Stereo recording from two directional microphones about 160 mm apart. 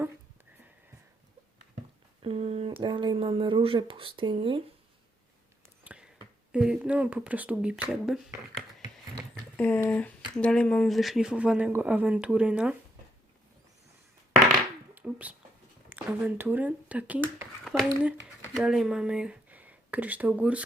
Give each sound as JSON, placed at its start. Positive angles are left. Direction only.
{"t": 2.2, "sound": "speech", "side_deg": -35}
{"t": 5.8, "sound": "a sound", "side_deg": -10}
{"t": 6.5, "sound": "speech", "side_deg": -5}
{"t": 9.6, "sound": "speech", "side_deg": 10}
{"t": 14.9, "sound": "speech", "side_deg": -10}